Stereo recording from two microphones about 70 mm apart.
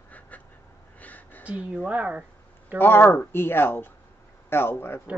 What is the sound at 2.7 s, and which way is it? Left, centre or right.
Speech, left.